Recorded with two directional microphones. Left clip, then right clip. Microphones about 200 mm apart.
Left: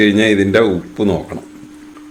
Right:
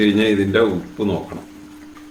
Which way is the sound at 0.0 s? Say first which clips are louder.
Left 4 dB; 35° left (ahead or behind).